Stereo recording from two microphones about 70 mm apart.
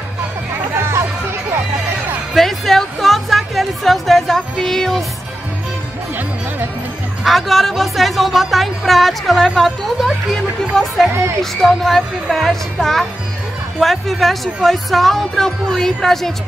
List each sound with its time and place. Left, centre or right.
0.7 s music: right
2.3 s music: centre
7.2 s speech: centre